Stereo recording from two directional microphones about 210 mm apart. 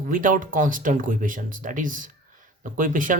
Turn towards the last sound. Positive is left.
turn(degrees=-40)  # may be behind; listen again after turning